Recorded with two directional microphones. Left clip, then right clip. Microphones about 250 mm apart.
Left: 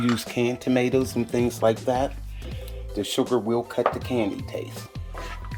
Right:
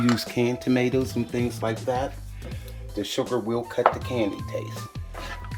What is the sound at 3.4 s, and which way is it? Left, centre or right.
Speech, left.